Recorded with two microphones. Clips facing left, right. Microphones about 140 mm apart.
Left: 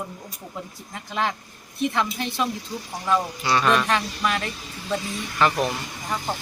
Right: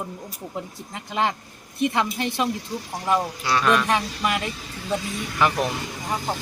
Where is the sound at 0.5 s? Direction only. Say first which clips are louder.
Right 2 dB; 15° right (ahead or behind).